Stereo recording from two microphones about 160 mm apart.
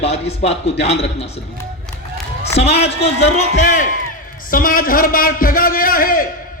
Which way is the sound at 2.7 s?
40° left (ahead or behind).